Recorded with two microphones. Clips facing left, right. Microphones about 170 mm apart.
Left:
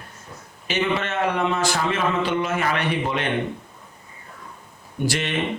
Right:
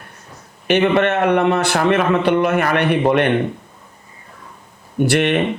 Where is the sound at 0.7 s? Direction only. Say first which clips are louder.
Right 9 dB; 60° right (ahead or behind).